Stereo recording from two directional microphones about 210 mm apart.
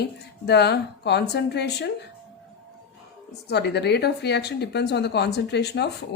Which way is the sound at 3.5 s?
50° left (ahead or behind).